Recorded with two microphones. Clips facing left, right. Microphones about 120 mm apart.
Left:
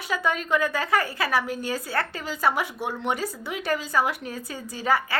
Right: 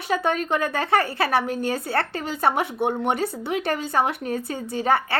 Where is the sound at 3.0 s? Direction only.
55° right (ahead or behind).